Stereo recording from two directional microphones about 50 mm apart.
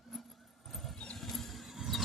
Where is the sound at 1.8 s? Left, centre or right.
Centre.